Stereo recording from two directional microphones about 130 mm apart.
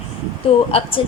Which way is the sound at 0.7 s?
50° left (ahead or behind).